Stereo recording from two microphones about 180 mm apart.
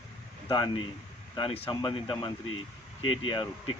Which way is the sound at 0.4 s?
25° left (ahead or behind).